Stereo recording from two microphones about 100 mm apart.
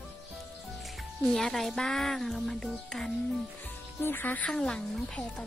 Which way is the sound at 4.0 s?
20° left (ahead or behind).